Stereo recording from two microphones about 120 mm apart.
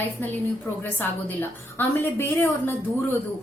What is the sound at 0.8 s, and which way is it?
A woman's voice, 15° left (ahead or behind).